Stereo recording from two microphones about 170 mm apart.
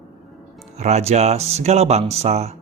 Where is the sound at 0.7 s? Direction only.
40° right (ahead or behind).